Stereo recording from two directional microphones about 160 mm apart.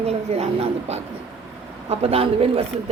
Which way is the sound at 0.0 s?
40° right (ahead or behind).